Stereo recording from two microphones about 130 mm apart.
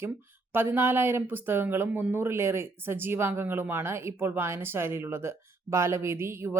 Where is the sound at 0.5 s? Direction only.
15° right (ahead or behind).